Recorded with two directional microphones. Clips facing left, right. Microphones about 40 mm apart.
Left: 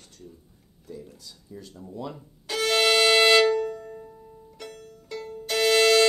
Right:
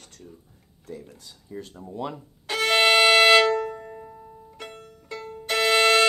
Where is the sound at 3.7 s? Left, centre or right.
Right.